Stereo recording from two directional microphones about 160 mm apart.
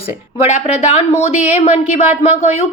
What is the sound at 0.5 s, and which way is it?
A woman's voice, 45° left (ahead or behind).